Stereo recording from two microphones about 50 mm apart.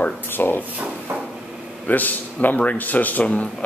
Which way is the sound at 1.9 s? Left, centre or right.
Left.